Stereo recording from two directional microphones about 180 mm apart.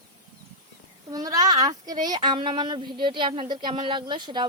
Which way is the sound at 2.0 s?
25° right (ahead or behind).